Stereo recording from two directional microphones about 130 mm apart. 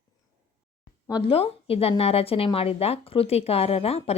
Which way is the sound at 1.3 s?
50° left (ahead or behind).